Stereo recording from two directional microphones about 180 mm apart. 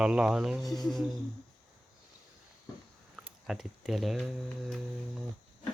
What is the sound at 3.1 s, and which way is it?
Speech, 5° right (ahead or behind).